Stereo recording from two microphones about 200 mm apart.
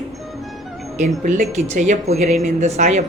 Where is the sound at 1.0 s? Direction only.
40° right (ahead or behind).